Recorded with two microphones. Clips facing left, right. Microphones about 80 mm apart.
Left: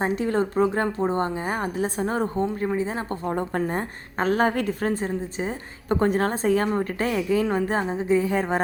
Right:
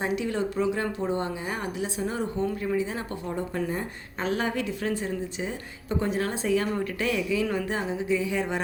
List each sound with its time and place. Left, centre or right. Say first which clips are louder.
0.0 s a woman's voice: left 4 dB; left
3.3 s a woman's voice: left 3 dB; left